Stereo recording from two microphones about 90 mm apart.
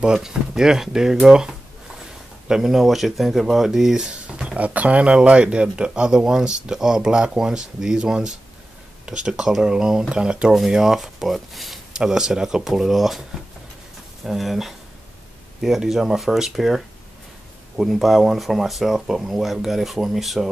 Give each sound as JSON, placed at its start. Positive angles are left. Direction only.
{"t": 0.0, "sound": "speech", "side_deg": -10}
{"t": 14.2, "sound": "speech", "side_deg": 0}